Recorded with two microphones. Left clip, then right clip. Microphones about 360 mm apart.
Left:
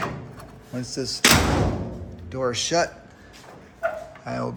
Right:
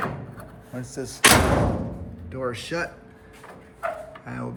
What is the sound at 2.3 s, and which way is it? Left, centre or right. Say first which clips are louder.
Speech: left 6 dB; centre.